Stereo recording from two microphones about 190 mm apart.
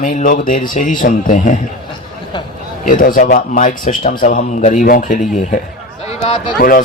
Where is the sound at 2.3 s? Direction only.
25° left (ahead or behind).